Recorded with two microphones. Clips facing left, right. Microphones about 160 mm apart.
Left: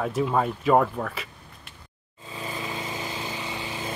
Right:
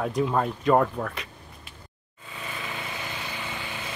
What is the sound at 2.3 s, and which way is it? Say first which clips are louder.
Vehicle: left 3 dB; 30° left (ahead or behind).